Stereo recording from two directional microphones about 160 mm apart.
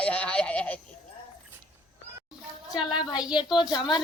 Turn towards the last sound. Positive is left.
turn(degrees=25)  # may be behind; listen again after turning